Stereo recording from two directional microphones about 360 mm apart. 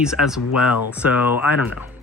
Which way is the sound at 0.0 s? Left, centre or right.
Centre.